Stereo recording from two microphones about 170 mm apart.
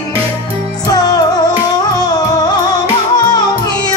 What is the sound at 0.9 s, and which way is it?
Music, 20° left (ahead or behind).